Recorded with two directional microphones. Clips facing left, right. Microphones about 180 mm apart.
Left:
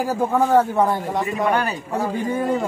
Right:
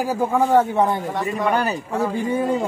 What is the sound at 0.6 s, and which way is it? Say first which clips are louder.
Speech: even; centre (ahead or behind).